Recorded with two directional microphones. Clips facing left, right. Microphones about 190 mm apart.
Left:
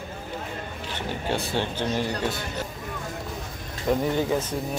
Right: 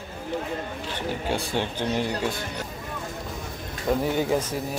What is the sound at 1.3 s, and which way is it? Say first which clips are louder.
Speech: left 2 dB; 15° right (ahead or behind).